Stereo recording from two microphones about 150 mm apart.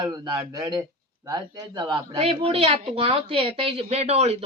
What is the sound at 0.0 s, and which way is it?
A man's voice, 25° right (ahead or behind).